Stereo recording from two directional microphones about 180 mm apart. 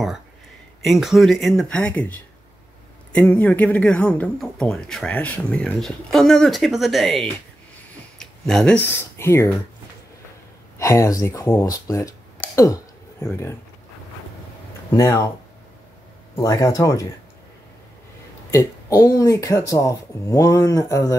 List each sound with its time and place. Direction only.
0.8 s speech: centre (ahead or behind)
8.2 s a sound: 5° left (ahead or behind)
8.8 s speech: 15° left (ahead or behind)
10.8 s speech: 15° left (ahead or behind)
14.9 s speech: 15° left (ahead or behind)
16.3 s speech: 20° left (ahead or behind)
18.5 s speech: 20° left (ahead or behind)